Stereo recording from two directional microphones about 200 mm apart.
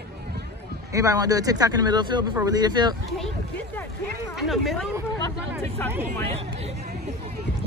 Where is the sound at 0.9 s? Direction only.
15° right (ahead or behind).